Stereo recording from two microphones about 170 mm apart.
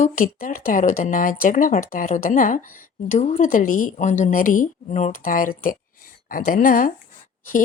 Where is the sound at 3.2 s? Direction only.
40° left (ahead or behind).